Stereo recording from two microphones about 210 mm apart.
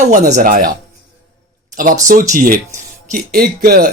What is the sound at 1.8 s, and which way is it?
A man's voice, 40° right (ahead or behind).